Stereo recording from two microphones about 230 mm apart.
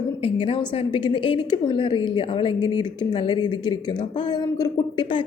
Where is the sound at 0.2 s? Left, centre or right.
Left.